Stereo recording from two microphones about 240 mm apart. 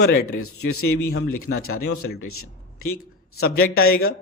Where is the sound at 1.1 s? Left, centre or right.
Left.